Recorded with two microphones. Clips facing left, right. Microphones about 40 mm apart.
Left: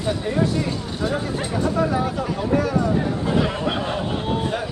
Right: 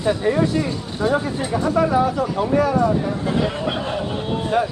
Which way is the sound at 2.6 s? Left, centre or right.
Right.